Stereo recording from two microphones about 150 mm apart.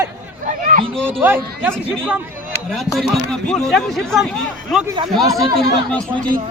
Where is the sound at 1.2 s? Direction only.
15° right (ahead or behind).